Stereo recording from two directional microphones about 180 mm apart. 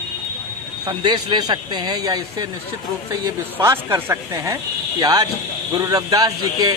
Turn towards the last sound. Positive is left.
turn(degrees=-20)  # may be behind; listen again after turning